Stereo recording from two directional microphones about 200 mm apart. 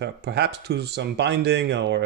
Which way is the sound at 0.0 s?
55° right (ahead or behind).